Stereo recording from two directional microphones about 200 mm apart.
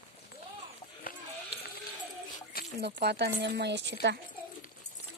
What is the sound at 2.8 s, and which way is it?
Speech, 55° right (ahead or behind).